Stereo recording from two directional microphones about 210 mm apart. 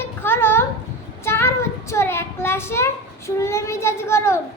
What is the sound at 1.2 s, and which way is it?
A child's voice, 10° left (ahead or behind).